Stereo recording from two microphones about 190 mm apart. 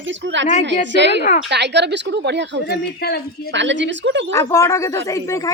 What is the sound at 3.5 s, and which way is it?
Speech, 70° right (ahead or behind).